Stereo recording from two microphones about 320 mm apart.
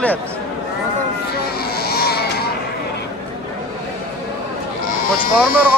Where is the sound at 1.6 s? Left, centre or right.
Left.